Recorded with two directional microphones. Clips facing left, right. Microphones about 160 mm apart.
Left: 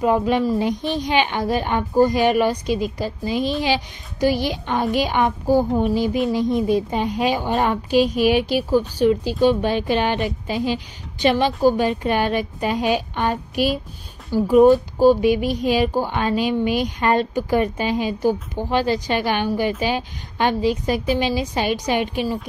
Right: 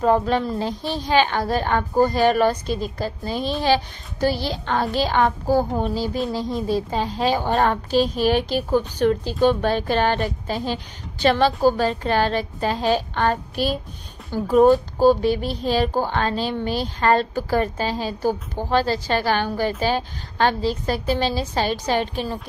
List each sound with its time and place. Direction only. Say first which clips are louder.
0.0 s a woman's voice: left 1 dB; 10° left (ahead or behind)
7.3 s a woman's voice: right 1 dB; 45° right (ahead or behind)
7.9 s a woman's voice: left 5 dB; 10° left (ahead or behind)
10.1 s a woman's voice: left 1 dB; 45° right (ahead or behind)
10.6 s a woman's voice: left 4 dB; 15° left (ahead or behind)